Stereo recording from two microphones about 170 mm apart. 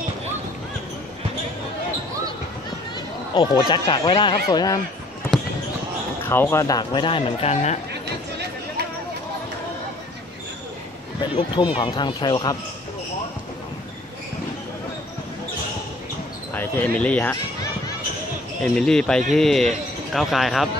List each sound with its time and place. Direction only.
3.3 s speech: 25° left (ahead or behind)
6.2 s speech: 15° left (ahead or behind); by 7.8 s 40° left (ahead or behind)
11.3 s speech: 25° left (ahead or behind)
16.5 s speech: 10° left (ahead or behind)
18.6 s speech: 5° left (ahead or behind)